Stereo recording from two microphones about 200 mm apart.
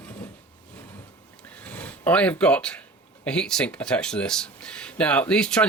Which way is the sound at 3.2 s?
5° left (ahead or behind).